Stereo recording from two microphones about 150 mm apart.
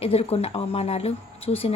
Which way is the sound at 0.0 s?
40° left (ahead or behind).